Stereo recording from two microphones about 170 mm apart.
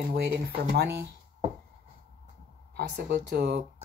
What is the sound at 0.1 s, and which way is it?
Speech, 75° right (ahead or behind).